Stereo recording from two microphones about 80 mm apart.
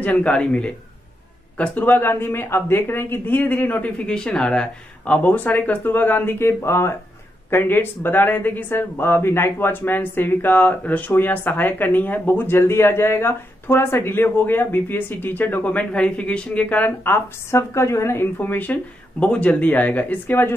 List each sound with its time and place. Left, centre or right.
0.0 s a man's voice: centre
1.9 s speech: left